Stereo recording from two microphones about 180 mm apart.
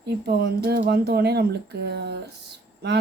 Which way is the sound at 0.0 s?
65° right (ahead or behind).